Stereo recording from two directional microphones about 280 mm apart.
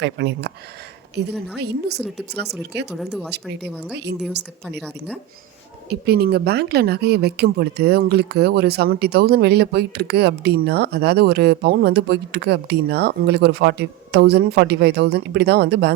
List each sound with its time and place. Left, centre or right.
0.0 s a woman's voice: right
1.5 s a woman's voice: right
2.9 s speech: centre
3.3 s a woman's voice: right
4.8 s speech: centre
5.9 s a woman's voice: right